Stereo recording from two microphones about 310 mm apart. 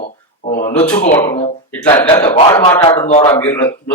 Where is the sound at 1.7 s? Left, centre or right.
Centre.